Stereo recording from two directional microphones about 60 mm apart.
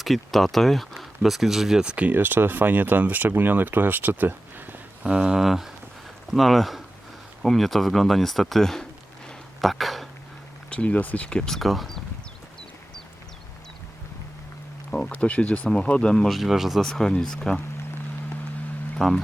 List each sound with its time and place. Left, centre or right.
0.0 s speech: centre
2.1 s speech: right
5.0 s speech: centre
9.6 s a sound: centre
10.7 s speech: left
11.5 s speech: centre
14.8 s a sound: centre
15.1 s speech: left
16.4 s speech: centre
16.9 s speech: centre
18.9 s speech: centre